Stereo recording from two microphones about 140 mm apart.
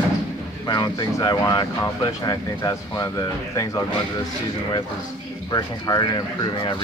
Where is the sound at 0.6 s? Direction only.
30° left (ahead or behind).